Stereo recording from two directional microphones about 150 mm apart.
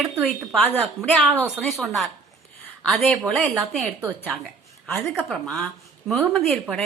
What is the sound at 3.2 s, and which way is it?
Speech, centre (ahead or behind).